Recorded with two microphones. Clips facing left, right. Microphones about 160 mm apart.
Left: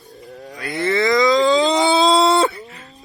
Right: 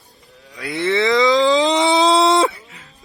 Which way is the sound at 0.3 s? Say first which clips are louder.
Left 11 dB; 55° left (ahead or behind).